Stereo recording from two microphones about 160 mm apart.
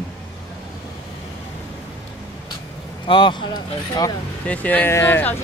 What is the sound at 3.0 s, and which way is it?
Speech, 30° left (ahead or behind).